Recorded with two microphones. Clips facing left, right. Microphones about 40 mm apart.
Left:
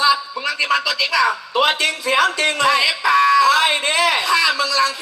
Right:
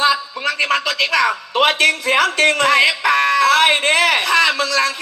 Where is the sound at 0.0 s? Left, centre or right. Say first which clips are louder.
Even; right.